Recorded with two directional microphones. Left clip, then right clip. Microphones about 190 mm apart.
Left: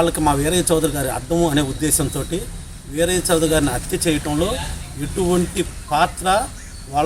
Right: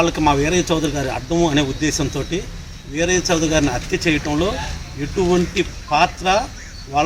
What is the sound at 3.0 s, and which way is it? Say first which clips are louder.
Speech: even; 10° right (ahead or behind).